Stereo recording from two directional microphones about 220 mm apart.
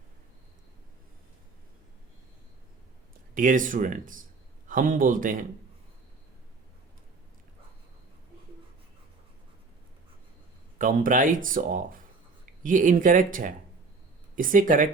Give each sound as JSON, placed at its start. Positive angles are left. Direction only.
{"t": 3.3, "sound": "speech", "side_deg": -35}
{"t": 10.8, "sound": "speech", "side_deg": -35}